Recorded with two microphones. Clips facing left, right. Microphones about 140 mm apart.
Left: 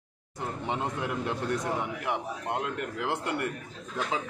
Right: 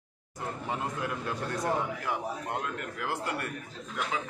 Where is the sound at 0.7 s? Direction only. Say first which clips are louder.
Left 2 dB; 25° left (ahead or behind).